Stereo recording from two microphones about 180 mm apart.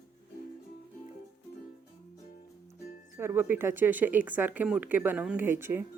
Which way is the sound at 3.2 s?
15° right (ahead or behind).